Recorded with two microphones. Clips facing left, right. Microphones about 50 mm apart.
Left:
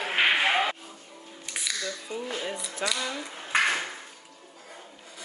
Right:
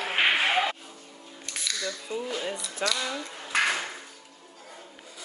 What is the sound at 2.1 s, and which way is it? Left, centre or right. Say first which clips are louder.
Speech: right 3 dB; left.